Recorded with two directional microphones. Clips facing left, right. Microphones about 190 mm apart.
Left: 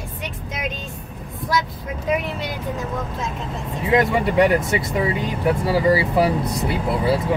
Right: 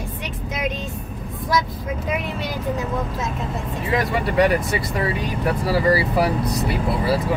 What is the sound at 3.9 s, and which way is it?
Speech, 20° left (ahead or behind).